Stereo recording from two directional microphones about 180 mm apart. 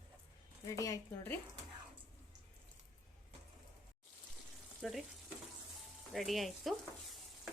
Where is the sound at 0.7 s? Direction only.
20° left (ahead or behind).